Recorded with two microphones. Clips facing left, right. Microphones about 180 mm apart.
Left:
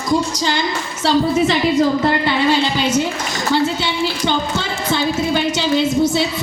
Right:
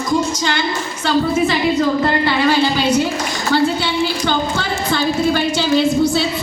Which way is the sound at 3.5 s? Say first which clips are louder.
Right 3 dB; 20° left (ahead or behind).